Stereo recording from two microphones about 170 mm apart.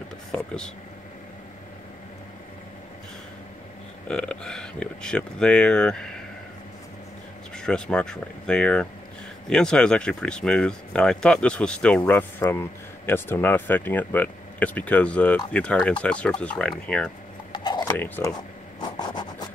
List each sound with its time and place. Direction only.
4.1 s speech: 5° left (ahead or behind)
7.5 s speech: 5° left (ahead or behind)
17.5 s a sound: 25° left (ahead or behind)
17.9 s speech: 10° left (ahead or behind)
18.8 s scratch: 25° left (ahead or behind)